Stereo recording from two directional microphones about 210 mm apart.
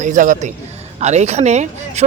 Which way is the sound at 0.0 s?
35° right (ahead or behind).